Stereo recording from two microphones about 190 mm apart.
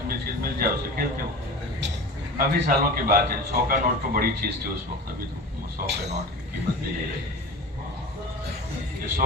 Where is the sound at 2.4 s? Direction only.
50° right (ahead or behind).